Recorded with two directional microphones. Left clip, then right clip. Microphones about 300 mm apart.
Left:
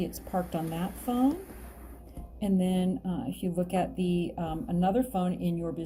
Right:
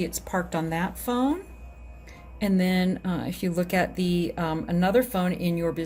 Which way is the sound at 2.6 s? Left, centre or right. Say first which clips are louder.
Right 5 dB; right.